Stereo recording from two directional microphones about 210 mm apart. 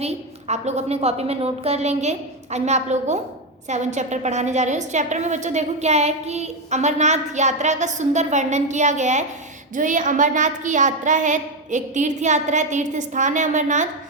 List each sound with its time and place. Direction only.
0.0 s a woman's voice: 30° right (ahead or behind)